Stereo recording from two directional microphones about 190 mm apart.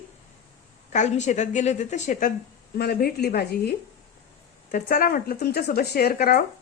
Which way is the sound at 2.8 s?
55° left (ahead or behind).